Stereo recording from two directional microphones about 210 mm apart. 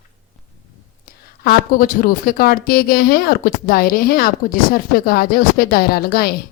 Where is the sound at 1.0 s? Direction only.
45° left (ahead or behind).